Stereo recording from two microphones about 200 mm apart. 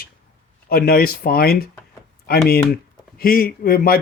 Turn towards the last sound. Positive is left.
turn(degrees=45)  # may be behind; listen again after turning